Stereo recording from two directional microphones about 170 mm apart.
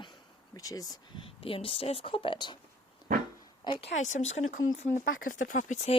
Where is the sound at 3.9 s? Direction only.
45° left (ahead or behind).